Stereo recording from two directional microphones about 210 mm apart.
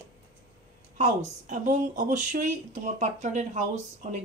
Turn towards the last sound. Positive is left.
turn(degrees=-35)  # may be behind; listen again after turning